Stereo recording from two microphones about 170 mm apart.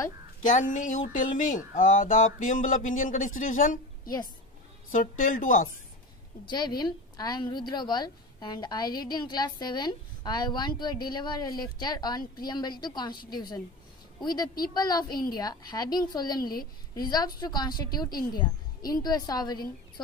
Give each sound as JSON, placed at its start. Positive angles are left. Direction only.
{"t": 0.4, "sound": "speech", "side_deg": 50}
{"t": 6.4, "sound": "a woman's voice", "side_deg": 25}